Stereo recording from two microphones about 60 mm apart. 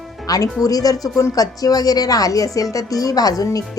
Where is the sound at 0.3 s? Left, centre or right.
Left.